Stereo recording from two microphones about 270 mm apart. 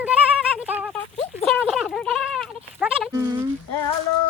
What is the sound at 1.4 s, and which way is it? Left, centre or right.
Goat, centre.